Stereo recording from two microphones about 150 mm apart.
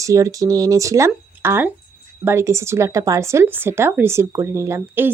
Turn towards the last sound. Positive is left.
turn(degrees=-15)  # may be behind; listen again after turning